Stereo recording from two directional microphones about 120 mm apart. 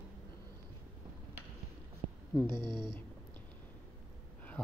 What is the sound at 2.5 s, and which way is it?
Speech, 40° right (ahead or behind).